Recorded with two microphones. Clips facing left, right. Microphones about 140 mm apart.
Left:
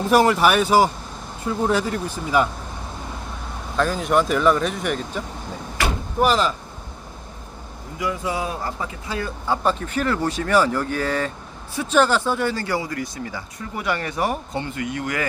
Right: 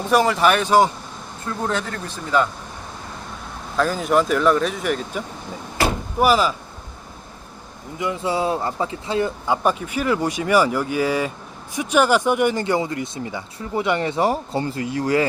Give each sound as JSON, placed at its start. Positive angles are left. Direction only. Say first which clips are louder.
{"t": 0.0, "sound": "speech", "louder": "left 1 dB", "side_deg": 0}
{"t": 3.8, "sound": "a man's voice", "louder": "right 1 dB", "side_deg": 0}
{"t": 7.9, "sound": "a man's voice", "louder": "right 2 dB", "side_deg": -25}